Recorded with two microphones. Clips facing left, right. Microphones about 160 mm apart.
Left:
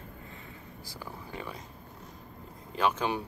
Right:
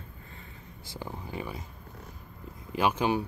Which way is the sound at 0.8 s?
20° right (ahead or behind).